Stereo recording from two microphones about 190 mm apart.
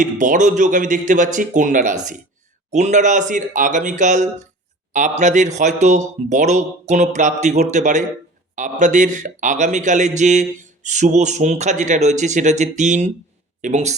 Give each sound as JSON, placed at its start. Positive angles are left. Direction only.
{"t": 0.0, "sound": "speech", "side_deg": -40}